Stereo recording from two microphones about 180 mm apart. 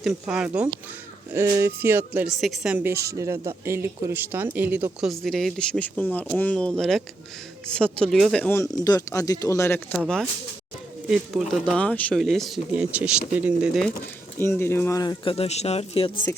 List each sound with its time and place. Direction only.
0.0 s speech: 5° right (ahead or behind)
8.7 s speech: 20° left (ahead or behind)
11.1 s speech: centre (ahead or behind)
14.3 s speech: 15° left (ahead or behind)